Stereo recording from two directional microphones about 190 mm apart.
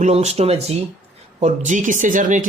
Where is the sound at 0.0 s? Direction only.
35° right (ahead or behind).